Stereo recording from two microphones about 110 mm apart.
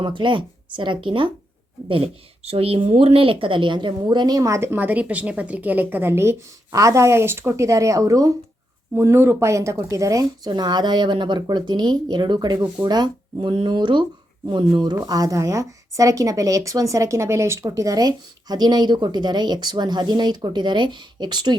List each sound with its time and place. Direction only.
0.0 s speech: 45° right (ahead or behind)
1.9 s a woman's voice: 65° right (ahead or behind); by 14.0 s 45° right (ahead or behind)
15.0 s speech: 35° right (ahead or behind)